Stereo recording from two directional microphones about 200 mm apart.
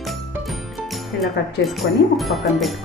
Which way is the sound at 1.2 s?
Centre (ahead or behind).